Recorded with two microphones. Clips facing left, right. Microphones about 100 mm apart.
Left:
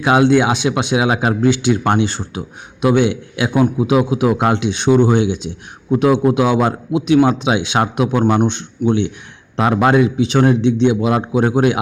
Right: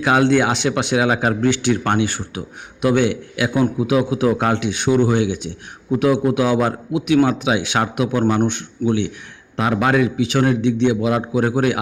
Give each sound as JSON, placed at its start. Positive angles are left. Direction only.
{"t": 0.0, "sound": "a man's voice", "side_deg": 20}
{"t": 8.2, "sound": "a man's voice", "side_deg": 15}
{"t": 8.4, "sound": "a man's voice", "side_deg": 25}